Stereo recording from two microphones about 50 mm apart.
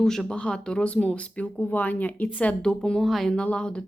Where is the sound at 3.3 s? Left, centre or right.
Centre.